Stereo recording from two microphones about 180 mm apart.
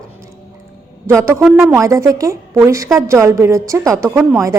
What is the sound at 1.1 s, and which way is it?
Speech, 15° right (ahead or behind).